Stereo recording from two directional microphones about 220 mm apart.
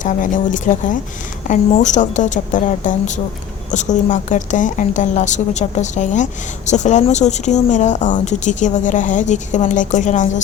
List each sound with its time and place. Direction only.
0.0 s a woman's voice: 35° left (ahead or behind)